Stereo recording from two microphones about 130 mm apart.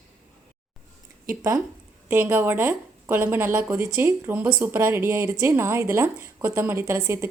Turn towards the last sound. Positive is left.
turn(degrees=-20)  # may be behind; listen again after turning